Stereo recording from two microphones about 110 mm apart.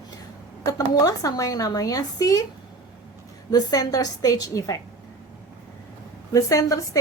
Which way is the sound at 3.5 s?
35° left (ahead or behind).